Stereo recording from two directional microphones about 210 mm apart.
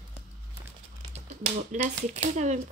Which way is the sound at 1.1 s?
35° right (ahead or behind).